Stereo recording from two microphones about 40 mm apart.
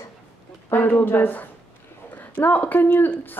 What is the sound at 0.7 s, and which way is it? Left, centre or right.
Speech, left.